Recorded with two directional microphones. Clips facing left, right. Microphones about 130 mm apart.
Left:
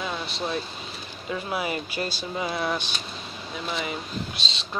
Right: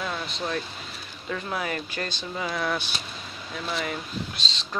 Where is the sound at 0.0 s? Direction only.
10° left (ahead or behind).